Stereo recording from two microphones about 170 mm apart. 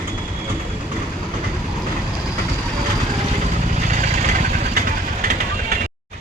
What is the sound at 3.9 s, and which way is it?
Vehicle, 45° right (ahead or behind).